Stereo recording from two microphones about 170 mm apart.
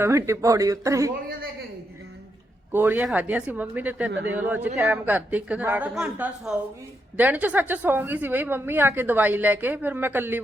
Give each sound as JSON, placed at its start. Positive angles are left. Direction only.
{"t": 0.0, "sound": "speech", "side_deg": -15}
{"t": 2.7, "sound": "a woman's voice", "side_deg": -10}